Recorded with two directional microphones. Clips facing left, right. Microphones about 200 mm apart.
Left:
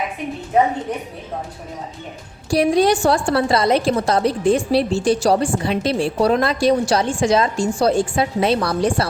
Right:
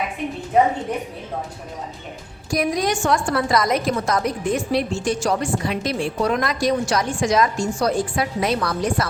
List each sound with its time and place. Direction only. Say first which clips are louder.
2.5 s a woman's voice: left 6 dB; 30° left (ahead or behind)